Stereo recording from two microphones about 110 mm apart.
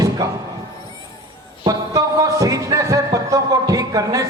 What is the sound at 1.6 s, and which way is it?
Music, 35° right (ahead or behind).